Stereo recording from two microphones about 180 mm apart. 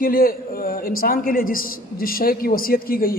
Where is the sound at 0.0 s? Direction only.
55° left (ahead or behind).